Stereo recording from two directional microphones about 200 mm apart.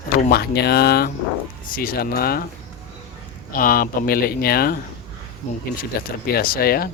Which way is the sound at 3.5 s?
45° left (ahead or behind).